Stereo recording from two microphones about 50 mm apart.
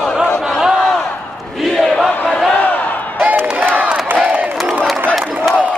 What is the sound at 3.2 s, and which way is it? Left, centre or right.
Crowd, right.